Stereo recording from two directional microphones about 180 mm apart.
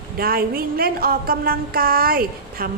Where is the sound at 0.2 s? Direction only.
55° right (ahead or behind).